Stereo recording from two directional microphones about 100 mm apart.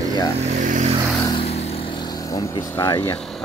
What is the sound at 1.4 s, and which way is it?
Vehicle, 90° left.